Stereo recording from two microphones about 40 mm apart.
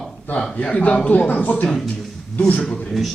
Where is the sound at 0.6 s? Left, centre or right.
Left.